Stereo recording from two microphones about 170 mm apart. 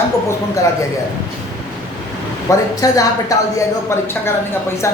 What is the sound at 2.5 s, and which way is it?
Speech, 20° left (ahead or behind).